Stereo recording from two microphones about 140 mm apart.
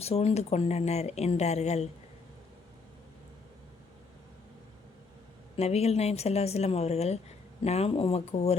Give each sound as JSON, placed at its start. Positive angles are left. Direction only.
{"t": 0.0, "sound": "speech", "side_deg": 50}
{"t": 5.5, "sound": "speech", "side_deg": 50}